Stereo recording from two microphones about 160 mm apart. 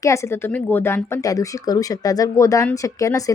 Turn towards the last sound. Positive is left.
turn(degrees=20)  # may be behind; listen again after turning